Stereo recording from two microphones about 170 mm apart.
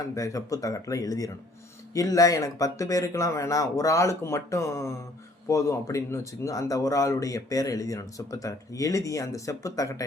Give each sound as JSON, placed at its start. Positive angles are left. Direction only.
{"t": 0.1, "sound": "speech", "side_deg": 20}